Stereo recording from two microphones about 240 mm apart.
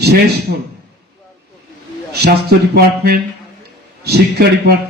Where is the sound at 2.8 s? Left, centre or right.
Right.